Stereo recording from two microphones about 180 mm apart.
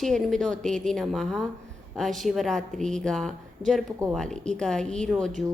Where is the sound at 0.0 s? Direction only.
Centre (ahead or behind).